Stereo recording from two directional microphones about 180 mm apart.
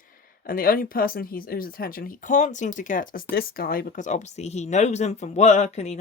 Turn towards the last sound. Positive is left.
turn(degrees=40)  # may be behind; listen again after turning